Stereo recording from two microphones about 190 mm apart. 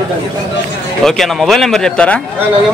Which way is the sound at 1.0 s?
Centre (ahead or behind).